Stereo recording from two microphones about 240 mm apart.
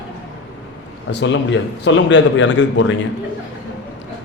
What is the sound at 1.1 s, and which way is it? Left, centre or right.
A man's voice, left.